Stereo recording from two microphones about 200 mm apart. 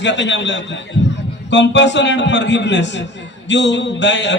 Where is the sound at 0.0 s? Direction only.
60° left (ahead or behind).